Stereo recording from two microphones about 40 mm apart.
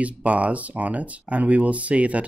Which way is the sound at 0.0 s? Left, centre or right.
Right.